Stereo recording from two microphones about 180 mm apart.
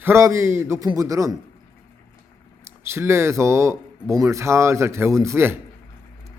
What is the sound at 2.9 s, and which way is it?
Speech, 15° right (ahead or behind).